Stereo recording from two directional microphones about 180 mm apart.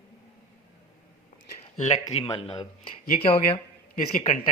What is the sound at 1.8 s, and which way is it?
Speech, 40° left (ahead or behind).